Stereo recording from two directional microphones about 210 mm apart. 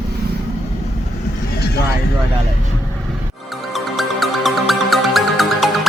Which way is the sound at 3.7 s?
Centre (ahead or behind).